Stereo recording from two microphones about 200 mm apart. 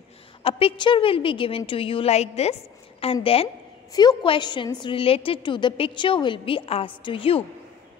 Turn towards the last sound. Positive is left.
turn(degrees=25)  # may be behind; listen again after turning